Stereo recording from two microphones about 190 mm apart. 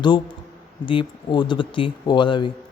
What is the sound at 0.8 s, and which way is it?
Speech, 25° left (ahead or behind).